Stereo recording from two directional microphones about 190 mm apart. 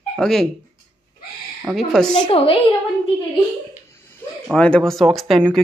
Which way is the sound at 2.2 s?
30° left (ahead or behind).